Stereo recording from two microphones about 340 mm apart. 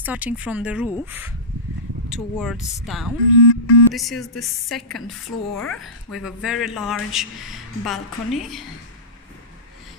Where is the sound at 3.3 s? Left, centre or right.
Left.